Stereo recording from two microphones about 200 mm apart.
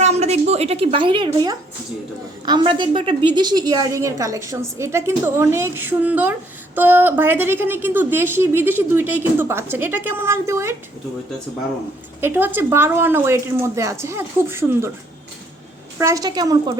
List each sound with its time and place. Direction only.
0.0 s a woman's voice: 35° right (ahead or behind); by 10.8 s 15° right (ahead or behind)
12.2 s a woman's voice: 10° right (ahead or behind)
16.0 s a woman's voice: 15° right (ahead or behind)